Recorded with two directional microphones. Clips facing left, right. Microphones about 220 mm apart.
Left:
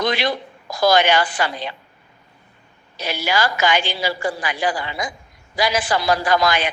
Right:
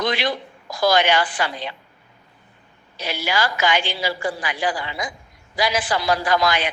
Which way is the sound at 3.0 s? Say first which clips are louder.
Left 2 dB; 40° left (ahead or behind).